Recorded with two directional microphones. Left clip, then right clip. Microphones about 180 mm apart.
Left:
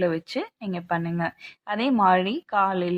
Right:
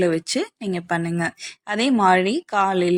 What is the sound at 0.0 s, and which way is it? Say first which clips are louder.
Speech: right 4 dB; 15° right (ahead or behind).